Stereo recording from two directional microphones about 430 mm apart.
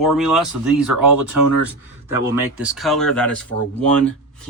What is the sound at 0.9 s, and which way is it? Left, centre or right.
Speech, right.